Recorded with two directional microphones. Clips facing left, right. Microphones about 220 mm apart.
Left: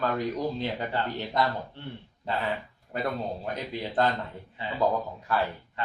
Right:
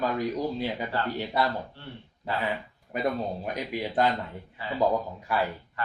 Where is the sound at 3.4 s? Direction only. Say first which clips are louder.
Right 2 dB; 15° right (ahead or behind).